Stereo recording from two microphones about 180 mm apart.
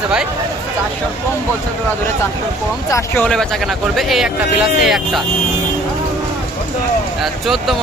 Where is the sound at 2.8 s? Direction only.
15° left (ahead or behind).